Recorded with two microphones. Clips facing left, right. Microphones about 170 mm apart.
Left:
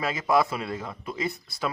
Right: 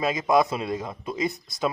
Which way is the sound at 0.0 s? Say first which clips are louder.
Right 2 dB; 20° right (ahead or behind).